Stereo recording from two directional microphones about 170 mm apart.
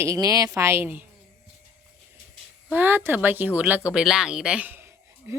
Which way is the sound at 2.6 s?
10° right (ahead or behind).